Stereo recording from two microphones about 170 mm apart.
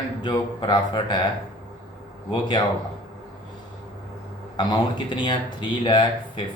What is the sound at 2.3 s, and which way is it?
Speech, 25° left (ahead or behind).